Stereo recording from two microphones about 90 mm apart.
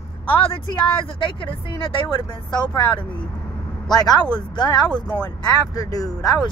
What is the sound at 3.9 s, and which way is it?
Speech, 45° left (ahead or behind).